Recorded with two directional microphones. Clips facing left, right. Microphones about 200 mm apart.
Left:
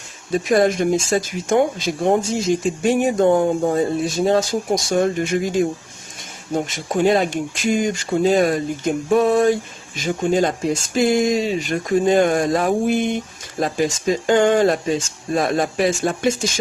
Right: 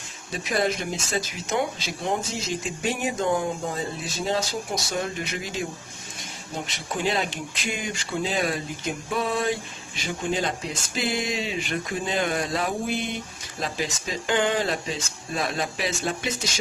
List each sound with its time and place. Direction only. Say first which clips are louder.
0.3 s speech: left 9 dB; 50° left (ahead or behind)